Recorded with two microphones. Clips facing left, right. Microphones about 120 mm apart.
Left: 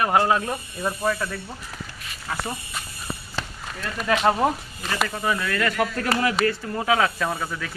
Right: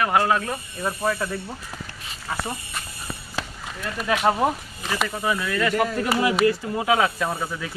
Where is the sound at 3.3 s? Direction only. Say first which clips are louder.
Right 1 dB; 10° right (ahead or behind).